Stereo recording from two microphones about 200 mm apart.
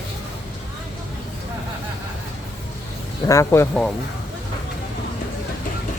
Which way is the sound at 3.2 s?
15° left (ahead or behind).